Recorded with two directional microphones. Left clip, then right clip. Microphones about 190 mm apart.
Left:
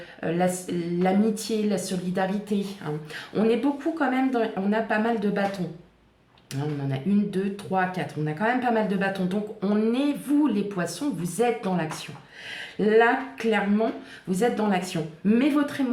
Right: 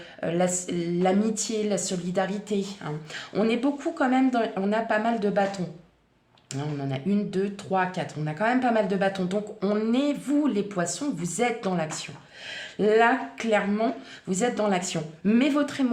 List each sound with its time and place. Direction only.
0.2 s a woman's voice: 40° right (ahead or behind)
6.5 s a woman's voice: 40° right (ahead or behind)